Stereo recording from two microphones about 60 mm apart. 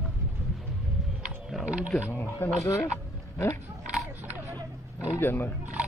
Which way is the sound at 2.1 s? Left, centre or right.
Left.